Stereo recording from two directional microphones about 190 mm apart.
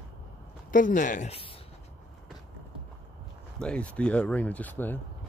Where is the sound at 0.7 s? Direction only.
45° left (ahead or behind).